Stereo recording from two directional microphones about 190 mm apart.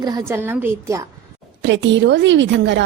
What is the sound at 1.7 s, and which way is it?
A woman's voice, 70° right (ahead or behind).